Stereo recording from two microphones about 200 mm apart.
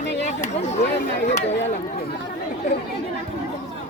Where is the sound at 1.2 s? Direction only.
35° left (ahead or behind).